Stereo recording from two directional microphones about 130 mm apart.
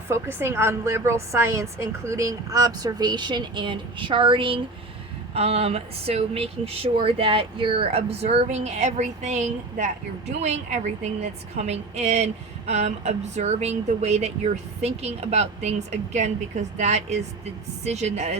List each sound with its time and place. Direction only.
0.1 s a woman's voice: 20° right (ahead or behind); by 18.3 s 60° right (ahead or behind)